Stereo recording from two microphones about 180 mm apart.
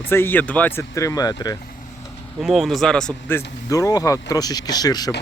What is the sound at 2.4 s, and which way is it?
Speech, centre (ahead or behind).